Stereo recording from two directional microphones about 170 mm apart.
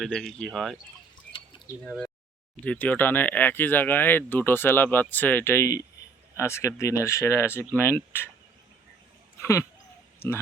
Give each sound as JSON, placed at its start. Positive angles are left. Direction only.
{"t": 0.0, "sound": "speech", "side_deg": 0}
{"t": 1.8, "sound": "speech", "side_deg": 5}
{"t": 9.4, "sound": "speech", "side_deg": 20}